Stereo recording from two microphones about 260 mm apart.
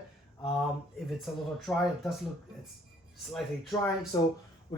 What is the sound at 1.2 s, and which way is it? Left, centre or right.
Speech, centre.